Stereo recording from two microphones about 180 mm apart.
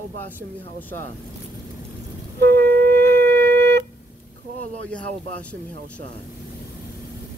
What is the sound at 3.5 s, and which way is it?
Wind instrument, 15° left (ahead or behind).